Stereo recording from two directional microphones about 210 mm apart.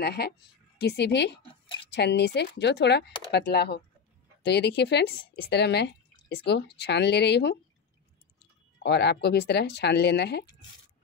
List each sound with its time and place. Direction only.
0.0 s speech: 50° left (ahead or behind)
8.8 s speech: 50° left (ahead or behind)